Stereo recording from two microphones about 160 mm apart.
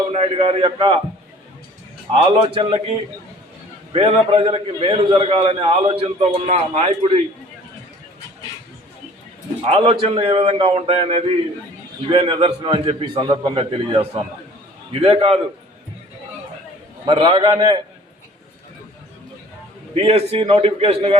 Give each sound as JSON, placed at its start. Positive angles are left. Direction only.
{"t": 0.1, "sound": "a man's voice", "side_deg": -40}
{"t": 2.1, "sound": "a man's voice", "side_deg": -35}
{"t": 3.9, "sound": "a man's voice", "side_deg": -35}
{"t": 9.6, "sound": "a man's voice", "side_deg": -35}
{"t": 17.1, "sound": "a man's voice", "side_deg": -30}
{"t": 19.9, "sound": "a man's voice", "side_deg": -40}